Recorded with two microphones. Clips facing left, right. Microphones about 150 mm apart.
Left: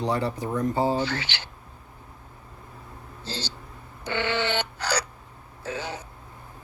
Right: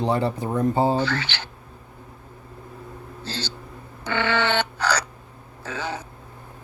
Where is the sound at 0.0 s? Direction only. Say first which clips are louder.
Right 3 dB; 25° right (ahead or behind).